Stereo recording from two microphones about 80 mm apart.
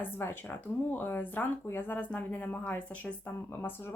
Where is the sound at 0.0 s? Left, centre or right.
Left.